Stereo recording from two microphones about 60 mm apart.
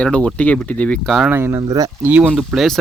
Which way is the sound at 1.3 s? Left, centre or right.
Right.